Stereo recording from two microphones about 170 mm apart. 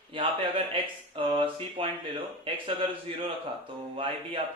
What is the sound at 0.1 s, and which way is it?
Speech, 30° right (ahead or behind).